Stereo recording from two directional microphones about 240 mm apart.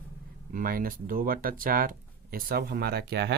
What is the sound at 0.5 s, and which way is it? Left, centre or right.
Speech, right.